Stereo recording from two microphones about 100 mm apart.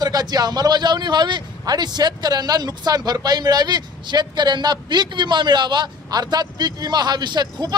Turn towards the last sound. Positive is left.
turn(degrees=-45)  # may be behind; listen again after turning